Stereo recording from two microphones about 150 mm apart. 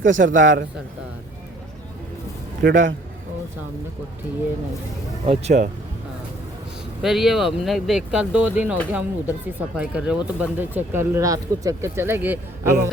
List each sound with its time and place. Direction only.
0.1 s a man's voice: 60° right (ahead or behind)
2.6 s a man's voice: 75° right (ahead or behind)
5.2 s speech: 45° right (ahead or behind)
7.0 s speech: centre (ahead or behind)